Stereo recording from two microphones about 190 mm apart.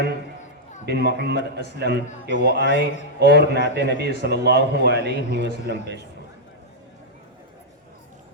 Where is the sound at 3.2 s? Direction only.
60° right (ahead or behind).